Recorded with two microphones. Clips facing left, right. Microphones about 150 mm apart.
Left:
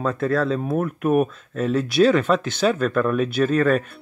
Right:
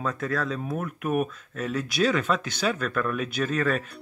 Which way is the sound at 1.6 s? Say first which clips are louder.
Left 8 dB; 30° left (ahead or behind).